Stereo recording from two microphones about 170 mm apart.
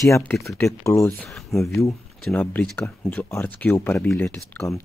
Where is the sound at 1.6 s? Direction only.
15° left (ahead or behind).